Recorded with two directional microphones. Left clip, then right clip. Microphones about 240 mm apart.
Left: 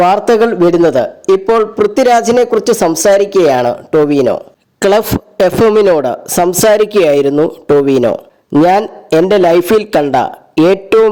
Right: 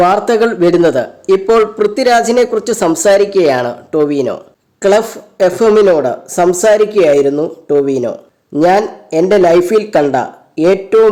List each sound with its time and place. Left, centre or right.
0.0 s a man's voice: left
4.8 s speech: left